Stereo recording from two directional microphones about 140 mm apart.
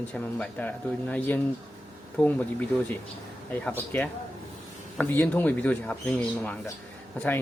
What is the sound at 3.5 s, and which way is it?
Speech, 15° left (ahead or behind).